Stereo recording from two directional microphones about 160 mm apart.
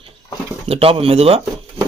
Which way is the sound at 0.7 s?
35° right (ahead or behind).